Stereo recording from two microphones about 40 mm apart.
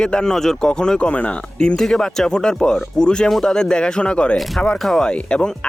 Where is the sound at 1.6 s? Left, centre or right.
Centre.